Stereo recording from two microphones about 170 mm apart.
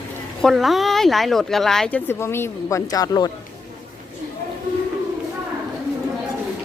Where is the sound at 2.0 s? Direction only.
15° left (ahead or behind).